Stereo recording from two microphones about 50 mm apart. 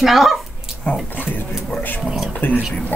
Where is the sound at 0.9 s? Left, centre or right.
Left.